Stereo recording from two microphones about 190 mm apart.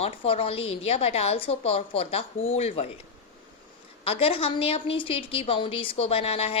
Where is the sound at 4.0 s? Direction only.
30° left (ahead or behind).